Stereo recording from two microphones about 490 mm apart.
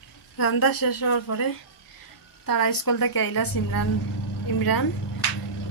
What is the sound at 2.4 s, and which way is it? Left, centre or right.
A woman's voice, left.